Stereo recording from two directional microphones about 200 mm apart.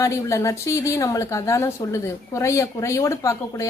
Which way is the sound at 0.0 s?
15° left (ahead or behind).